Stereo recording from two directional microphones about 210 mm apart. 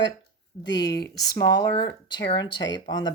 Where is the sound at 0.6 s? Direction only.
55° left (ahead or behind).